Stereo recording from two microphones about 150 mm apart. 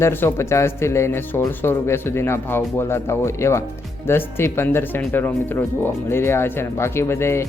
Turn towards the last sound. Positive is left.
turn(degrees=15)  # may be behind; listen again after turning